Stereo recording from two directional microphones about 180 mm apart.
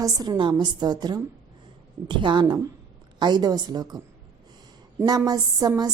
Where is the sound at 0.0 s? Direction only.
20° right (ahead or behind).